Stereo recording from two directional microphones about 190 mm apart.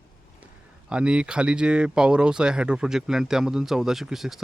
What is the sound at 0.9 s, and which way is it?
Speech, 5° right (ahead or behind).